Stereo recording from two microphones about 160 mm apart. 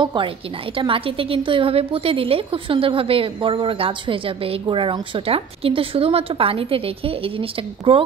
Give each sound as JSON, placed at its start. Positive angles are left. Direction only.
{"t": 0.0, "sound": "a woman's voice", "side_deg": -30}